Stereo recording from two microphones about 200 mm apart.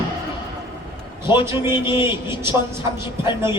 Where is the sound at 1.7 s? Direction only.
25° left (ahead or behind).